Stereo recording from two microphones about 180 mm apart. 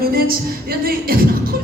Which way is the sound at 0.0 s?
55° right (ahead or behind).